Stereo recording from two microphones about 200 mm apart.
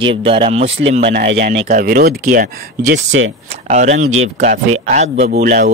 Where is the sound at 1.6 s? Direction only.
45° right (ahead or behind).